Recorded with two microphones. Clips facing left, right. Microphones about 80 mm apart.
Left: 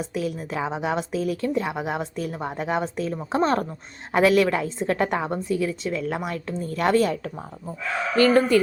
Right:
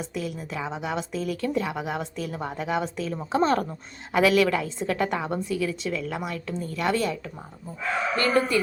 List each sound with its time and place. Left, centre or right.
0.0 s speech: left
1.4 s a woman's voice: left
8.2 s speech: left